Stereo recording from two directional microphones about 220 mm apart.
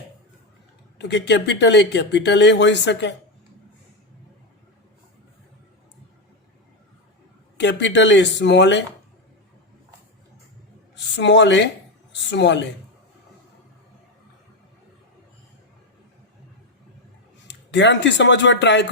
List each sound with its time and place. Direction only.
0.9 s speech: 50° left (ahead or behind)
7.5 s speech: 55° left (ahead or behind)
10.9 s speech: 50° left (ahead or behind)
17.5 s speech: 55° left (ahead or behind)